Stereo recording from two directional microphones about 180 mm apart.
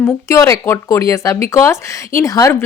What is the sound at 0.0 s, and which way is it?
A woman's voice, 15° left (ahead or behind).